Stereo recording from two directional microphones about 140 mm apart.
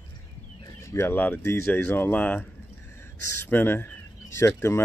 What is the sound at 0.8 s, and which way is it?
Speech, 20° left (ahead or behind).